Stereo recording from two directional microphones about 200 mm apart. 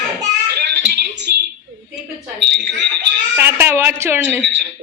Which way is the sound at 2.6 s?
60° right (ahead or behind).